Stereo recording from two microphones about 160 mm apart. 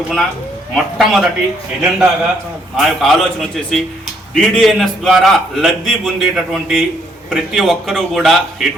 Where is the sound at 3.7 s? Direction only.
Centre (ahead or behind).